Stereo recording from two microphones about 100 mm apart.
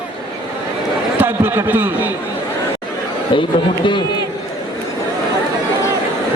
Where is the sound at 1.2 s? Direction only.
20° right (ahead or behind).